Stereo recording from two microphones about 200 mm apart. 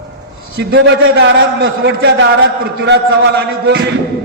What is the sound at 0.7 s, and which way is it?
A man's voice, 60° right (ahead or behind).